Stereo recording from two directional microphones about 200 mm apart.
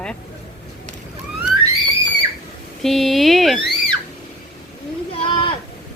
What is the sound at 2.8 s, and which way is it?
Speech, centre (ahead or behind).